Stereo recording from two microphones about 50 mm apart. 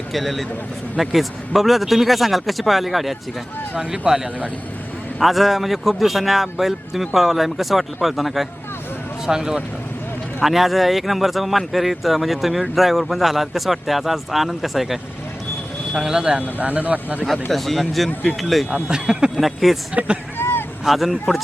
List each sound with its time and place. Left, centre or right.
0.1 s speech: centre
3.8 s speech: centre
5.2 s speech: centre
9.2 s speech: centre
10.4 s speech: centre
16.6 s speech: right
17.2 s speech: centre
18.9 s speech: centre
19.4 s speech: centre
19.9 s speech: right
20.4 s a sound: left
20.8 s speech: centre